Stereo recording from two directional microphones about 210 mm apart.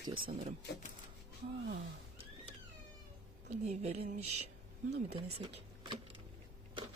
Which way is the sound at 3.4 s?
35° right (ahead or behind).